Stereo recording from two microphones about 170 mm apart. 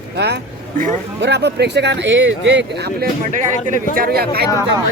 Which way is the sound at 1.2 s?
85° right.